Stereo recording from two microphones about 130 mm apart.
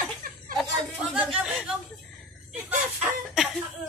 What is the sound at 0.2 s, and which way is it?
Chuckle, 90° right.